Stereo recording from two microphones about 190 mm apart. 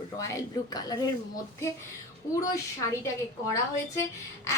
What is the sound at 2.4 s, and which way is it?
Speech, 15° left (ahead or behind).